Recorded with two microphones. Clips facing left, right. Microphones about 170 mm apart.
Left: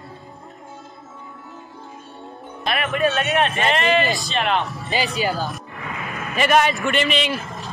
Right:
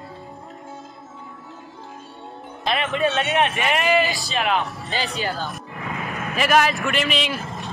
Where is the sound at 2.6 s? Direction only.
20° right (ahead or behind); by 4.8 s centre (ahead or behind).